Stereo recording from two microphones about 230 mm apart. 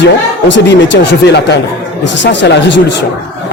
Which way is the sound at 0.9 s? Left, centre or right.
Left.